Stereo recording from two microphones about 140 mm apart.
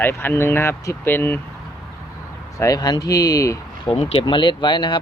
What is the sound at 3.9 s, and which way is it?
Speech, 50° left (ahead or behind).